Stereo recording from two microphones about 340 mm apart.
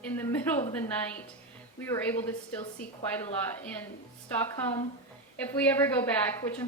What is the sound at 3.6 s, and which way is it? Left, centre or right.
Speech, centre.